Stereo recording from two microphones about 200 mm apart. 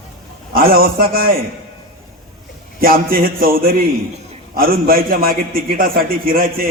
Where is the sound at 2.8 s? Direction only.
45° right (ahead or behind).